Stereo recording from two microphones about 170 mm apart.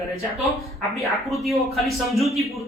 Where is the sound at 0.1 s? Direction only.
Centre (ahead or behind).